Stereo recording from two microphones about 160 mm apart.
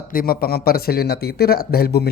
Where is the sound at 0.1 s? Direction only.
65° left (ahead or behind).